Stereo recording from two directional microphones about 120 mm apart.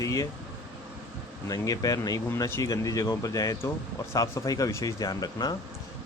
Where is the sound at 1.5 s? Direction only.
30° left (ahead or behind).